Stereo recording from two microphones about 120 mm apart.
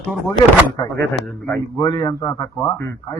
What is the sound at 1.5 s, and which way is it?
A man's voice, 30° left (ahead or behind).